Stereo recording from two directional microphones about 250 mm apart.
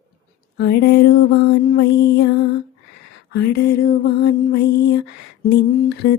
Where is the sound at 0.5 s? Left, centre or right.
Left.